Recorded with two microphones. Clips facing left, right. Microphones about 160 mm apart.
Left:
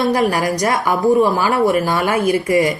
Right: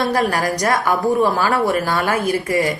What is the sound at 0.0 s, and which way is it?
A woman's voice, 20° left (ahead or behind).